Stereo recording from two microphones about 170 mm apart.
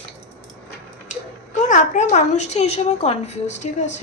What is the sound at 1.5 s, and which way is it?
A woman's voice, 50° left (ahead or behind).